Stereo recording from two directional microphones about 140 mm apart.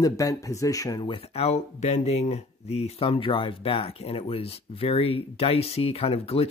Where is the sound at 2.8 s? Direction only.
45° left (ahead or behind).